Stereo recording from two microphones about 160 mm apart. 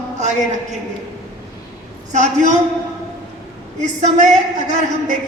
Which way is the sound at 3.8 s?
50° right (ahead or behind).